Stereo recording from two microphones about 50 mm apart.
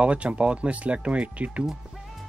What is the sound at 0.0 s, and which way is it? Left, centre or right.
Speech, right.